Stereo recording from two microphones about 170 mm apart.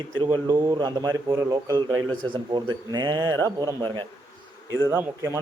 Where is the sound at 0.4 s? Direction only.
20° right (ahead or behind).